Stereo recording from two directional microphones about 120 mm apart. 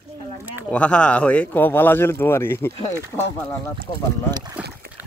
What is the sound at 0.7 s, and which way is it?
Speech, 10° left (ahead or behind).